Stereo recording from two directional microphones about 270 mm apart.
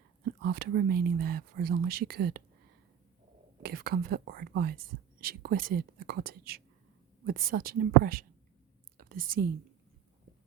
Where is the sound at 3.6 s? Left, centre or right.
Right.